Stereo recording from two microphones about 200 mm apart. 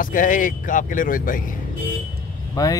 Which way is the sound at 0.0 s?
45° left (ahead or behind).